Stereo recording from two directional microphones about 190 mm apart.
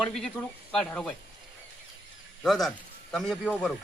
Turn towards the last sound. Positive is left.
turn(degrees=0)  # may be behind; listen again after turning